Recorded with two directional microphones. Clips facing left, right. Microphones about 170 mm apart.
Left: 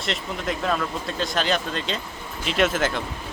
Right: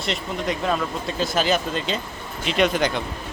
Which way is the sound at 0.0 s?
Centre (ahead or behind).